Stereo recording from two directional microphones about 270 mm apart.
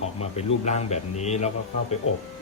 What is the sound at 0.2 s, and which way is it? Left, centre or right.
Speech, left.